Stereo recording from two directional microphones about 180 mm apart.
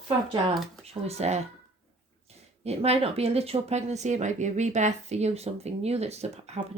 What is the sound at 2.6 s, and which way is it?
Speech, 35° right (ahead or behind).